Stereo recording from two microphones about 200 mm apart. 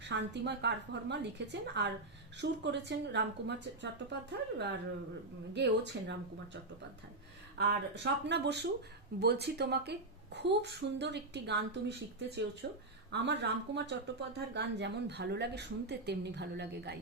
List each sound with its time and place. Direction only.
0.1 s speech: 60° right (ahead or behind)
7.7 s speech: 60° right (ahead or behind)